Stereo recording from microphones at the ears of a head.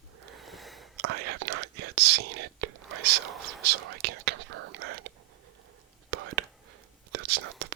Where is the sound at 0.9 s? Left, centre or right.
Right.